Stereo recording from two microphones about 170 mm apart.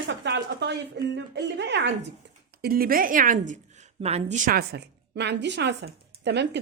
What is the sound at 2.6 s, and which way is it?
A woman's voice, 60° right (ahead or behind).